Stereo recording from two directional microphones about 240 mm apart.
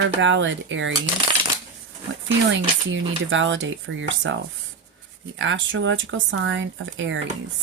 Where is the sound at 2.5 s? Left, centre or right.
Right.